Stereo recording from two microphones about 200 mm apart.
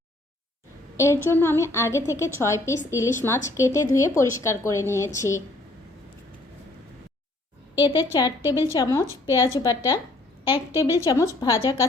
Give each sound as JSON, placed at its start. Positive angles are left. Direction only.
{"t": 0.9, "sound": "a woman's voice", "side_deg": 15}
{"t": 7.8, "sound": "a woman's voice", "side_deg": 25}
{"t": 11.0, "sound": "a woman's voice", "side_deg": 15}